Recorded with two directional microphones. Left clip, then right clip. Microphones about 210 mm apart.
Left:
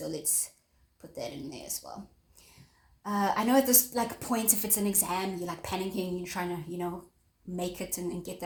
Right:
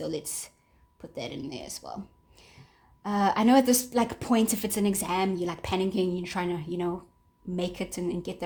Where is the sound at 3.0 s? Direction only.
40° right (ahead or behind).